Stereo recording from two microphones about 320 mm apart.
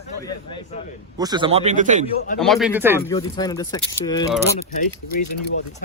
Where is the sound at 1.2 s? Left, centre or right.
Centre.